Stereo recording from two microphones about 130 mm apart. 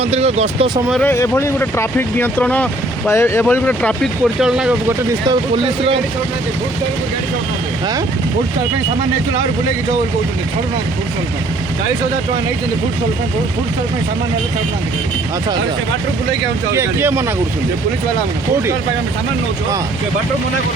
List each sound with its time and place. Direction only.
0.0 s speech: 55° right (ahead or behind)
1.0 s speech: 20° left (ahead or behind)
4.0 s speech: 5° right (ahead or behind)
5.6 s speech: 45° right (ahead or behind)
16.7 s speech: 20° right (ahead or behind)